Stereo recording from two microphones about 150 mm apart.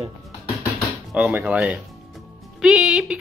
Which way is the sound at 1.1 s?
10° right (ahead or behind).